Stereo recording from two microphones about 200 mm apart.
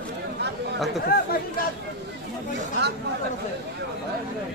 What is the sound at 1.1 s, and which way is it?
Speech, 50° left (ahead or behind).